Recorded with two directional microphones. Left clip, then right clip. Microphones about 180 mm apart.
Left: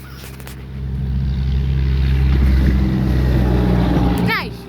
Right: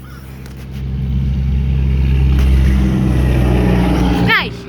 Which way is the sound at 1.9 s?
Centre (ahead or behind).